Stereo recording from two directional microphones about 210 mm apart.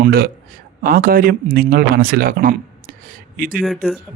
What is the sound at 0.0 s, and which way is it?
A man's voice, 45° right (ahead or behind).